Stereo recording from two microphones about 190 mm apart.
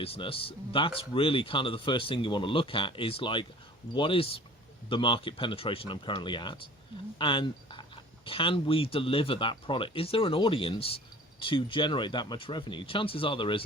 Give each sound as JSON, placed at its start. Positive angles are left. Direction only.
{"t": 0.0, "sound": "speech", "side_deg": 30}